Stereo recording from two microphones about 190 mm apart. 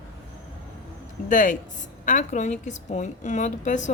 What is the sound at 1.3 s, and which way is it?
A woman's voice, 45° left (ahead or behind).